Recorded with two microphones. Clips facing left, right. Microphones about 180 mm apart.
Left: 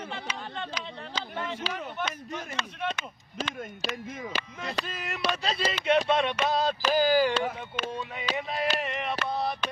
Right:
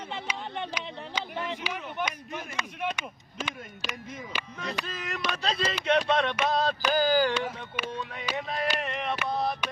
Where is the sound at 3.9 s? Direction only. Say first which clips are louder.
Left 3 dB; 50° left (ahead or behind).